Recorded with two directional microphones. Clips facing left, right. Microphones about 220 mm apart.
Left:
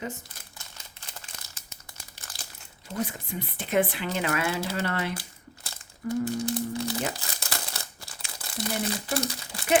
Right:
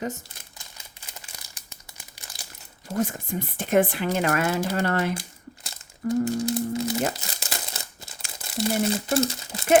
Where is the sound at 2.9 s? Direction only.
45° right (ahead or behind).